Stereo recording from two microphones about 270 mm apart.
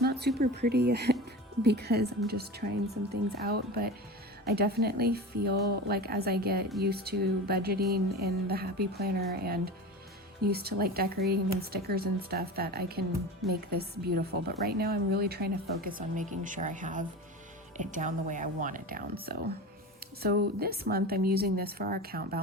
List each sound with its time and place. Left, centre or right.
0.0 s speech: right